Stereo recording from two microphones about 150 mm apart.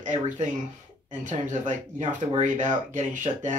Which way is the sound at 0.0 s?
55° right (ahead or behind).